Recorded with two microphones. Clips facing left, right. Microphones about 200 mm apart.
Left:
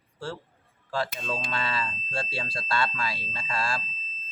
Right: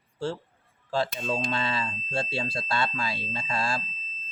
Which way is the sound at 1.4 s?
25° right (ahead or behind).